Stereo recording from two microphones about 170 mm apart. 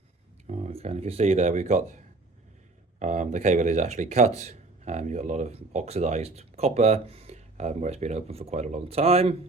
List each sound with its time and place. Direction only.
0.4 s speech: 40° right (ahead or behind)
3.0 s speech: 45° right (ahead or behind)